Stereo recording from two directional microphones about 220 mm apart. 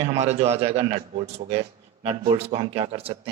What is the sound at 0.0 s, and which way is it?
Speech, 30° right (ahead or behind).